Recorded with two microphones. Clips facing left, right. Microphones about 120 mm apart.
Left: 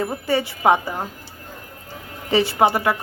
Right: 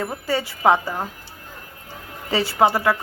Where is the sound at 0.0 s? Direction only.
20° left (ahead or behind).